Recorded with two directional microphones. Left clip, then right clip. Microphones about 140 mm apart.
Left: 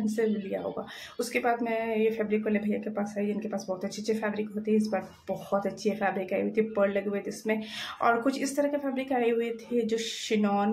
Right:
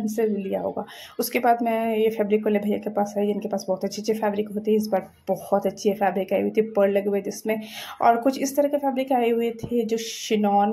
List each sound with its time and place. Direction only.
0.1 s speech: 35° right (ahead or behind)